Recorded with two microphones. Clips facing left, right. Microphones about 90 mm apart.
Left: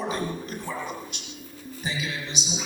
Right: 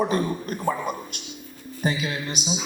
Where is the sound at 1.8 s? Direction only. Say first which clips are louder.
Right 6 dB; 50° right (ahead or behind).